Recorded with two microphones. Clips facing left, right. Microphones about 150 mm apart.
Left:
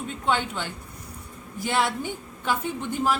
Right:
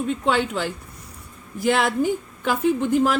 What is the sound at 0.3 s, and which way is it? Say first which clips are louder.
A woman's voice: right 2 dB; 90° right.